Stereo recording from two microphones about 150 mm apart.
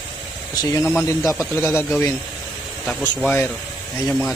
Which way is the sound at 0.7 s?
15° left (ahead or behind).